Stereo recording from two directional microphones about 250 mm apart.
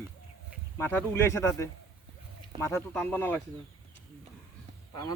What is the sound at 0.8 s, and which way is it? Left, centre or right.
Speech, centre.